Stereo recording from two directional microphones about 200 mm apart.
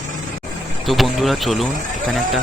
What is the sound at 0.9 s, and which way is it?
Speech, centre (ahead or behind).